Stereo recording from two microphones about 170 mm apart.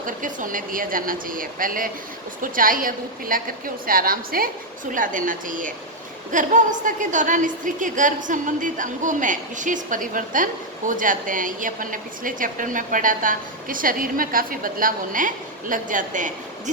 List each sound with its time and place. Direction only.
0.0 s a woman's voice: 50° right (ahead or behind)